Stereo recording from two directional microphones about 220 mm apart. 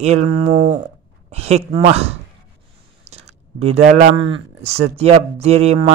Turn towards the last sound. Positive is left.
turn(degrees=-25)  # may be behind; listen again after turning